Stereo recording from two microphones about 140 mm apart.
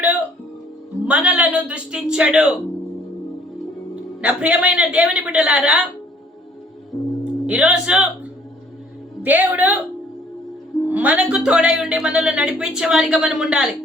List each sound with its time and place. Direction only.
0.0 s music: 10° right (ahead or behind)
1.0 s speech: 10° right (ahead or behind)
4.2 s speech: 10° right (ahead or behind)
6.9 s music: 20° left (ahead or behind)
7.4 s speech: 10° right (ahead or behind)
9.2 s speech: 10° right (ahead or behind)
10.8 s speech: 10° right (ahead or behind)